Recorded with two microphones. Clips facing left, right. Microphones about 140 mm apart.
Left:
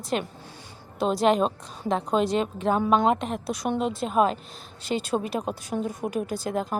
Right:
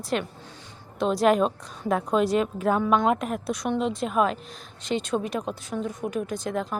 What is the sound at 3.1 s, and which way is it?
Speech, centre (ahead or behind).